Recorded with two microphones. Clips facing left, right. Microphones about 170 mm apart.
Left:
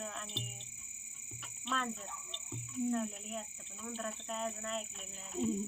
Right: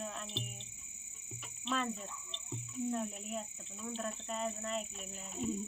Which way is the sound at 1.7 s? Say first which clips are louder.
Right 2 dB; 5° right (ahead or behind).